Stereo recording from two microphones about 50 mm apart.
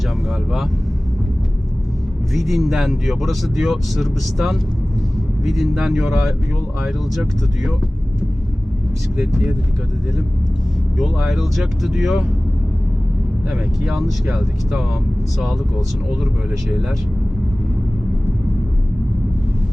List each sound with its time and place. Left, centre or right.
2.3 s speech: centre
9.1 s speech: centre
10.9 s speech: centre
13.5 s speech: centre